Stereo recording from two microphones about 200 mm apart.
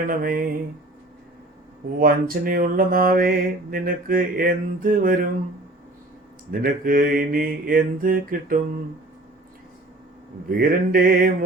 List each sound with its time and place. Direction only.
0.0 s mantra: 45° right (ahead or behind)
2.0 s mantra: 45° right (ahead or behind)
6.5 s mantra: 45° right (ahead or behind)
10.7 s mantra: 45° right (ahead or behind)